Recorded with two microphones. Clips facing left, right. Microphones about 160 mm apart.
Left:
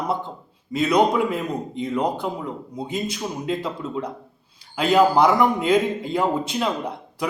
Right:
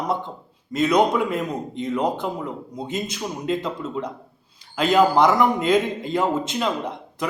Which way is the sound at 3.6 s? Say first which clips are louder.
Even; 5° left (ahead or behind).